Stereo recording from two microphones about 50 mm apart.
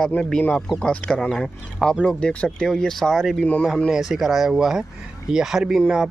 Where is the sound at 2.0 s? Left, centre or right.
Left.